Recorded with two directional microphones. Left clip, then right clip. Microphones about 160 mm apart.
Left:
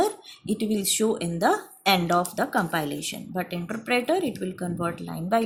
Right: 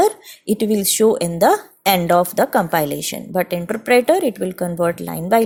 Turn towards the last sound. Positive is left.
turn(degrees=-45)  # may be behind; listen again after turning